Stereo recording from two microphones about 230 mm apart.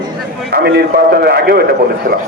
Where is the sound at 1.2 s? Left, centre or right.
Right.